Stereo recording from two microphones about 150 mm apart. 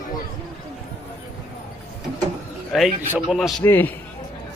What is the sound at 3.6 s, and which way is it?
Speech, 15° left (ahead or behind).